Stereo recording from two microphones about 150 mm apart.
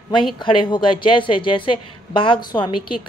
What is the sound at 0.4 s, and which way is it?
A woman's voice, 35° left (ahead or behind).